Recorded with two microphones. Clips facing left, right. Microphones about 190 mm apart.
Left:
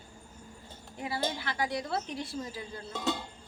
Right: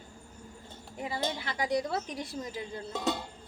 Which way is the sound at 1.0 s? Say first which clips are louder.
Left 1 dB; 20° right (ahead or behind).